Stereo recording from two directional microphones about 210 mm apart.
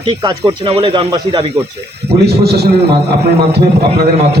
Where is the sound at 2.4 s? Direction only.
50° right (ahead or behind).